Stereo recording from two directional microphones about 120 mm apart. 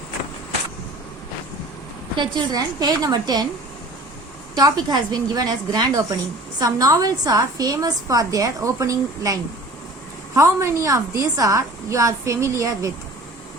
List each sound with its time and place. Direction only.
2.1 s a woman's voice: 40° right (ahead or behind)
4.5 s a woman's voice: 35° right (ahead or behind)